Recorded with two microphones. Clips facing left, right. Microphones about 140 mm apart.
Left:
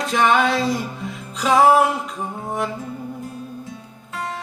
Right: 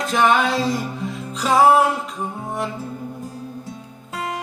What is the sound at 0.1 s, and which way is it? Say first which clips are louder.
Music: even; centre (ahead or behind).